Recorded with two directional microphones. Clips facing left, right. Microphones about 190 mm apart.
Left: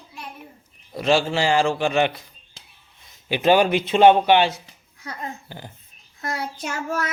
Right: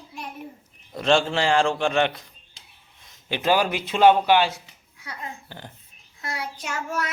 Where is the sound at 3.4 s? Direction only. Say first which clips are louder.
Left 5 dB; 20° left (ahead or behind).